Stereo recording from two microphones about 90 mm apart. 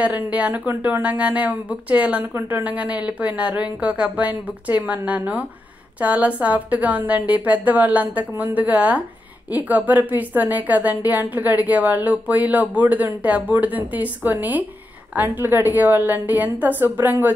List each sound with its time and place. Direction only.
0.0 s speech: 15° right (ahead or behind)
8.3 s a woman's voice: 30° right (ahead or behind)
8.5 s a woman's voice: 15° right (ahead or behind)